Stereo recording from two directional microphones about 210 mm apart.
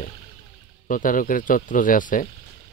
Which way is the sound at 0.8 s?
40° left (ahead or behind).